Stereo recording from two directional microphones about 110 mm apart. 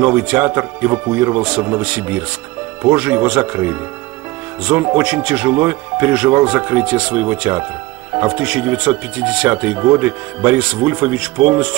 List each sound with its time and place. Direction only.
0.0 s speech: 15° right (ahead or behind)